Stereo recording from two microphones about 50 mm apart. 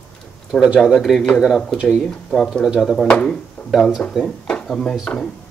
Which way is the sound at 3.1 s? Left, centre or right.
Centre.